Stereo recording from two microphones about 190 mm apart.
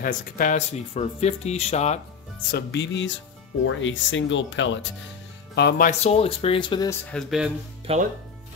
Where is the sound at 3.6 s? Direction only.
85° left.